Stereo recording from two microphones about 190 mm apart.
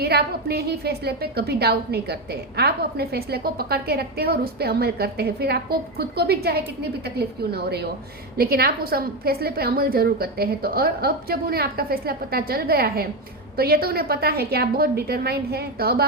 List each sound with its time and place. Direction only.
0.0 s a woman's voice: 55° right (ahead or behind)